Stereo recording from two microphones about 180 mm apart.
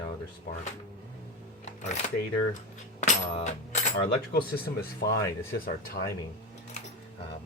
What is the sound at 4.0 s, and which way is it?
Speech, 60° left (ahead or behind).